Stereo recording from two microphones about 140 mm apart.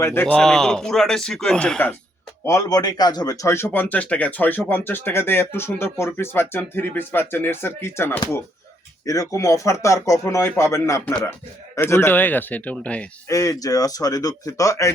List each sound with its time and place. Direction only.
0.0 s a man's voice: 15° left (ahead or behind)
2.4 s speech: 20° left (ahead or behind)
13.2 s speech: 25° left (ahead or behind)